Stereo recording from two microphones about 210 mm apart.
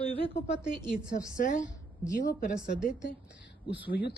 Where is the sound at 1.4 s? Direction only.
35° left (ahead or behind).